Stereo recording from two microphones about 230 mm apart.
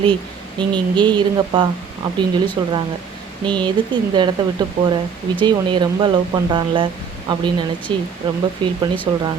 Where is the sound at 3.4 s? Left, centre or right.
Centre.